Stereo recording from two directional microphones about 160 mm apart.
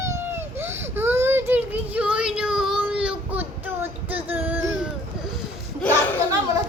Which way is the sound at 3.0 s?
10° right (ahead or behind).